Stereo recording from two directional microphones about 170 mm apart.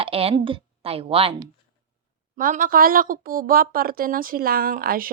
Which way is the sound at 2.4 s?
55° right (ahead or behind).